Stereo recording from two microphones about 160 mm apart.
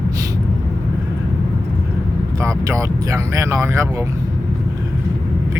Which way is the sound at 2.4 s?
20° right (ahead or behind).